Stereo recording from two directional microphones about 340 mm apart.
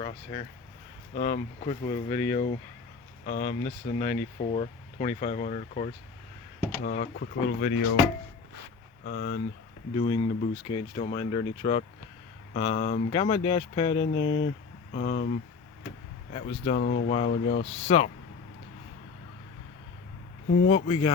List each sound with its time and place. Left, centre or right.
0.0 s speech: centre
9.0 s speech: left
9.9 s speech: centre
16.3 s speech: left
20.7 s speech: centre